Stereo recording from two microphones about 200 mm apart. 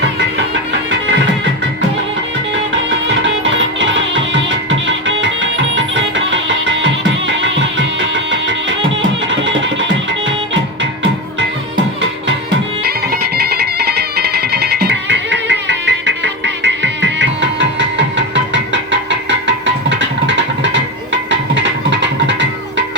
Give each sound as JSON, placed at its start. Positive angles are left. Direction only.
{"t": 3.2, "sound": "music", "side_deg": -70}
{"t": 12.8, "sound": "music", "side_deg": -50}